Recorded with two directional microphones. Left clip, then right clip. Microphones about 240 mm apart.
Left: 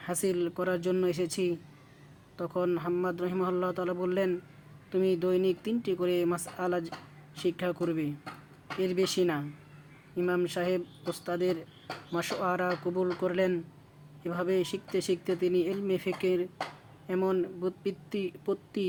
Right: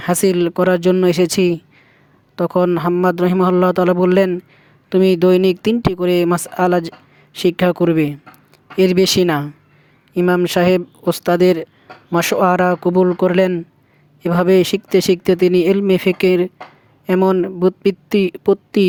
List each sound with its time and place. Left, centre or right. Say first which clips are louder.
0.0 s speech: right 15 dB; right